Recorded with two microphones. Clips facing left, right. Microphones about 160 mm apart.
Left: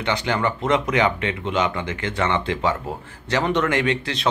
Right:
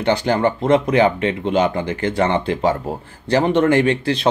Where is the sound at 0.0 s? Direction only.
35° right (ahead or behind).